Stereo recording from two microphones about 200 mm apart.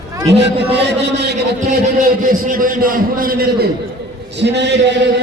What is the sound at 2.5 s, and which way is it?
A man's voice, 45° right (ahead or behind).